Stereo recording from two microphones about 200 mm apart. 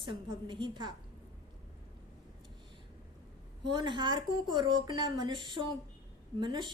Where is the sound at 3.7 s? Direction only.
25° right (ahead or behind).